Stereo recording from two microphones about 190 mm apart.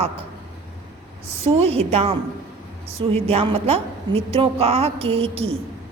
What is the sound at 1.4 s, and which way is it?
A woman's voice, 30° right (ahead or behind).